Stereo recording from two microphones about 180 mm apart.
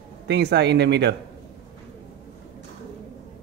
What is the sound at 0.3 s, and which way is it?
Speech, 70° right (ahead or behind).